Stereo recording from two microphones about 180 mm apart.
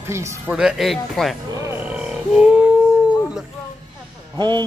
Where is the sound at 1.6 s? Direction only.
10° right (ahead or behind).